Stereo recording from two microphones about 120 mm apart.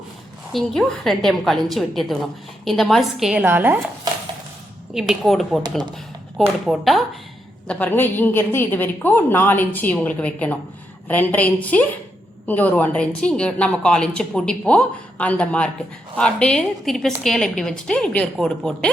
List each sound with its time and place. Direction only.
0.5 s a woman's voice: centre (ahead or behind)
3.4 s speech: 15° right (ahead or behind)
4.9 s a woman's voice: 5° right (ahead or behind)
6.7 s a woman's voice: centre (ahead or behind)
7.7 s a woman's voice: 15° left (ahead or behind)